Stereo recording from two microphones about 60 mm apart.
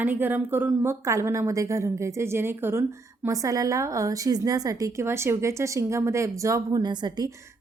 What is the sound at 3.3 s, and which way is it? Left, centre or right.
A woman's voice, right.